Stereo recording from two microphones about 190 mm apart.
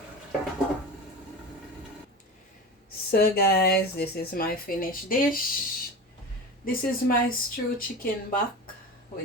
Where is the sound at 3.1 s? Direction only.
55° left (ahead or behind).